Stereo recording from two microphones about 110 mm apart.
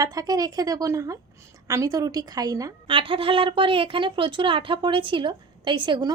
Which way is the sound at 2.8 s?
50° right (ahead or behind).